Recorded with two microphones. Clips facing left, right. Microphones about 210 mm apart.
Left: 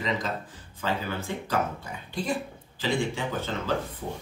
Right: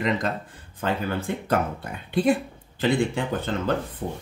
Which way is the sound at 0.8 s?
55° right (ahead or behind).